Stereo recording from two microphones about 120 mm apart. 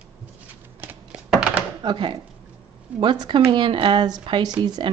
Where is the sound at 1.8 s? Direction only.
45° right (ahead or behind).